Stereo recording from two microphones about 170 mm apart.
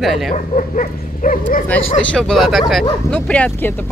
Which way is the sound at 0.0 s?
Centre (ahead or behind).